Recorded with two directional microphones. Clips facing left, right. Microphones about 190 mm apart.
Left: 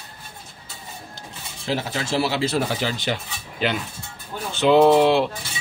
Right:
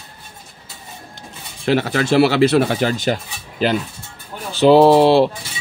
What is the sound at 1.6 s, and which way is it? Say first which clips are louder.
A man's voice: right 9 dB; 70° right (ahead or behind).